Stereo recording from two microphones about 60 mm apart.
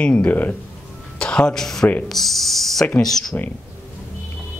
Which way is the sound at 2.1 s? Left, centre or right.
Centre.